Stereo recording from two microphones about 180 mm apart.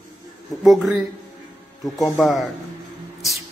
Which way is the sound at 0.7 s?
Centre (ahead or behind).